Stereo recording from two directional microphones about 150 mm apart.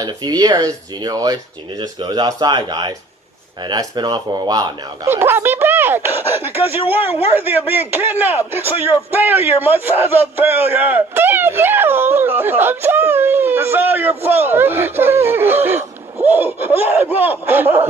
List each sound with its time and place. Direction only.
0.0 s speech: 25° right (ahead or behind)
5.1 s speech: 15° right (ahead or behind)